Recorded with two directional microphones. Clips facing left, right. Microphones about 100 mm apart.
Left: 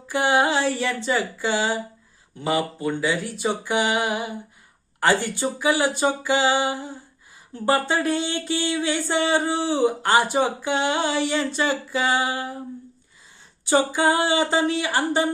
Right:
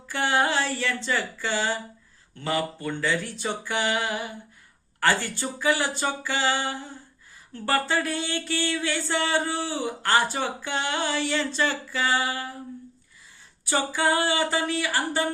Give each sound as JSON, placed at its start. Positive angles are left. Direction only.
{"t": 0.1, "sound": "speech", "side_deg": 15}
{"t": 13.7, "sound": "female singing", "side_deg": 20}